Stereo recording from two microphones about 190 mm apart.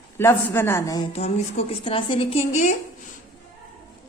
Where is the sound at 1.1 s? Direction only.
35° left (ahead or behind).